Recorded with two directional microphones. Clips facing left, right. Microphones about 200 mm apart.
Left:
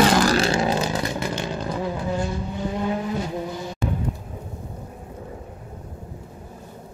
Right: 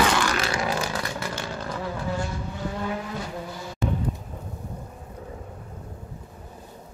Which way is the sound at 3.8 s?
Centre (ahead or behind).